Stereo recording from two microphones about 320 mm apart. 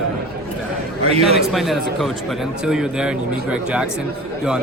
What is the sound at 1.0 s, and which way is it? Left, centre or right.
Speech, centre.